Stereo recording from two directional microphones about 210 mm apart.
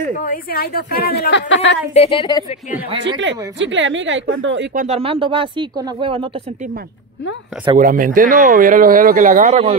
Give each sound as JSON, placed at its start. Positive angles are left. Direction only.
{"t": 0.2, "sound": "a woman's voice", "side_deg": 45}
{"t": 2.0, "sound": "a woman's voice", "side_deg": 25}
{"t": 3.2, "sound": "a woman's voice", "side_deg": -60}
{"t": 4.7, "sound": "speech", "side_deg": -30}
{"t": 7.7, "sound": "speech", "side_deg": -40}